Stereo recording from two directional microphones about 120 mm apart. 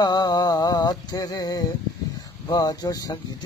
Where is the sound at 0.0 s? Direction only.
35° left (ahead or behind).